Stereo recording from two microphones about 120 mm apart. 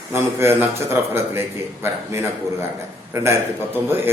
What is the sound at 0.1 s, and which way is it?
A man's voice, 20° right (ahead or behind).